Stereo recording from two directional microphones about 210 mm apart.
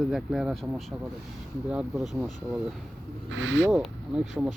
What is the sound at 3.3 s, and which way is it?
Speech, 65° right (ahead or behind).